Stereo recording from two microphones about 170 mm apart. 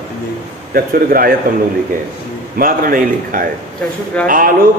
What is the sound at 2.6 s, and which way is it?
Mantra, 55° right (ahead or behind).